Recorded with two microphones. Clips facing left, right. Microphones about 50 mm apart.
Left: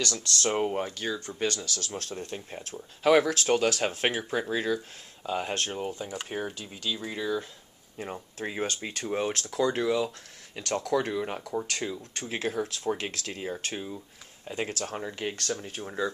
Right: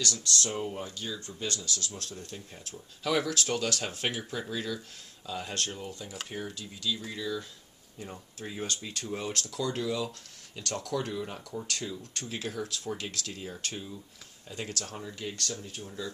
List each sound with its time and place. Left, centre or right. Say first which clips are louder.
0.0 s speech: left 3 dB; left
10.9 s speech: left 6 dB; left